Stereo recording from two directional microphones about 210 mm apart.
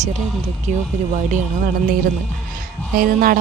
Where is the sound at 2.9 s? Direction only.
45° right (ahead or behind).